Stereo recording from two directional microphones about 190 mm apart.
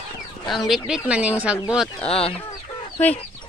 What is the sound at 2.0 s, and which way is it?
Speech, 30° left (ahead or behind).